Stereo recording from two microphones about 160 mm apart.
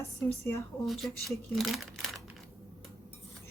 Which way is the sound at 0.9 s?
Centre (ahead or behind).